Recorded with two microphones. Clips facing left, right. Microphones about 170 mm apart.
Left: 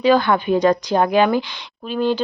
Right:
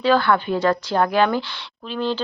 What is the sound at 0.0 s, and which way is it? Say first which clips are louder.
A woman's voice: left 2 dB; 15° left (ahead or behind).